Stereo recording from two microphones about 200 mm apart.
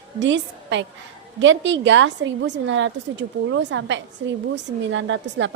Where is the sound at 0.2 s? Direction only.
65° right (ahead or behind).